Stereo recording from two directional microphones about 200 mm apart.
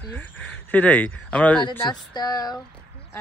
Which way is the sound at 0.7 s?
10° left (ahead or behind).